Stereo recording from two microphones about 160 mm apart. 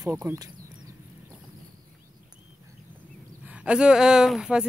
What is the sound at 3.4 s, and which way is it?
Speech, 10° right (ahead or behind).